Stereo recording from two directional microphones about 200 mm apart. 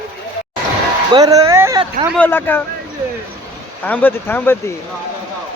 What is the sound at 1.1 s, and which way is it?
Speech, 20° right (ahead or behind).